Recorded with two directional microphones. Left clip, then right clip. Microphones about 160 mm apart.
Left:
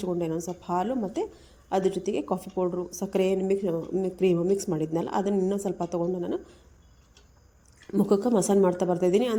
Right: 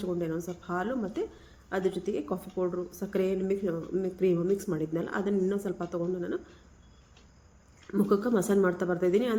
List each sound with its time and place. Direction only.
0.2 s a woman's voice: 35° left (ahead or behind)
7.9 s a woman's voice: 30° left (ahead or behind)